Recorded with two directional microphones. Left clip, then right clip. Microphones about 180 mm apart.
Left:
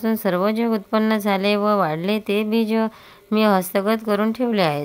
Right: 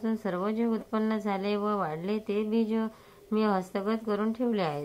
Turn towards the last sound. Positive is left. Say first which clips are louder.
# left 10 dB
turn(degrees=45)  # may be behind; listen again after turning